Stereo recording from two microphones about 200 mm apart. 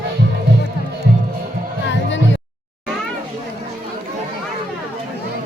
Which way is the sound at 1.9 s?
65° left (ahead or behind).